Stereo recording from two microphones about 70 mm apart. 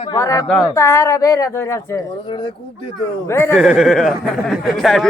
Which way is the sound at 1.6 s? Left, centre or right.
Left.